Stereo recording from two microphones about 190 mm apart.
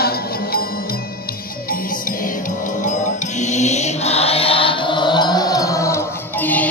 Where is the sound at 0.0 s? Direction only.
55° left (ahead or behind).